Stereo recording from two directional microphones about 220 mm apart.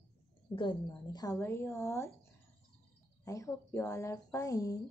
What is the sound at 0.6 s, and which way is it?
Speech, 20° left (ahead or behind).